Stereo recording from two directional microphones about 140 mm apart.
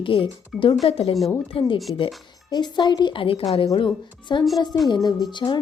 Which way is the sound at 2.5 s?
30° left (ahead or behind).